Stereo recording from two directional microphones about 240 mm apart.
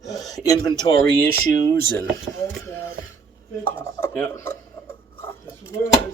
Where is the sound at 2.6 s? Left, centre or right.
Centre.